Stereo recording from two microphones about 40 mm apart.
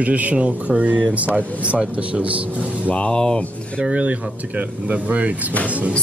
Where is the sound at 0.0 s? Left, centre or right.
Right.